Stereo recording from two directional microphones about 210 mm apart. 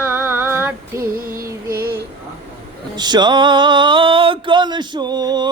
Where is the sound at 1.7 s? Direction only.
45° right (ahead or behind).